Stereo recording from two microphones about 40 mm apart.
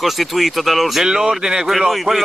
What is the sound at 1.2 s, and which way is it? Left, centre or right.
Speech, centre.